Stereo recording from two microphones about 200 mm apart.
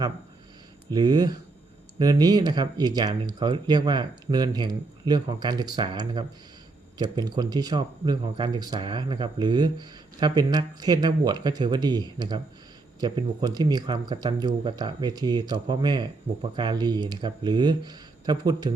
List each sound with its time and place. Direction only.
0.9 s speech: 20° right (ahead or behind)